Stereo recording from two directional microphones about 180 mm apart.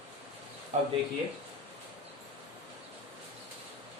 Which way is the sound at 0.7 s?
40° right (ahead or behind).